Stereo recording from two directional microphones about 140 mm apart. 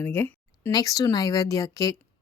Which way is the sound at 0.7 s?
25° left (ahead or behind).